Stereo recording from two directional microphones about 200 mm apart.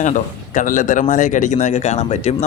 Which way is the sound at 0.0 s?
40° left (ahead or behind).